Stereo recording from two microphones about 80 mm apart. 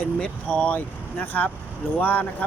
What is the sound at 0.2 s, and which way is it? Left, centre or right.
Speech, centre.